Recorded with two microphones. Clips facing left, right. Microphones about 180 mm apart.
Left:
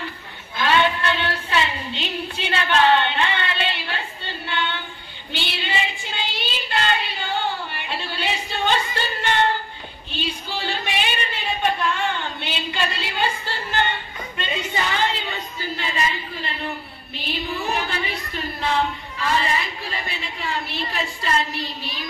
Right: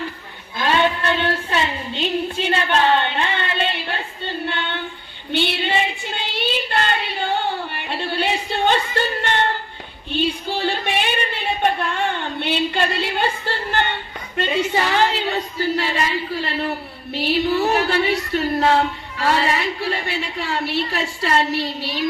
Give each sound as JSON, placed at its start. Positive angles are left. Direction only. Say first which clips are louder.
{"t": 0.6, "sound": "child singing", "louder": "right 1 dB", "side_deg": -40}
{"t": 5.3, "sound": "child singing", "louder": "right 7 dB", "side_deg": -55}
{"t": 10.1, "sound": "a sound", "louder": "right 7 dB", "side_deg": -55}
{"t": 12.4, "sound": "a woman's voice", "louder": "right 6 dB", "side_deg": -60}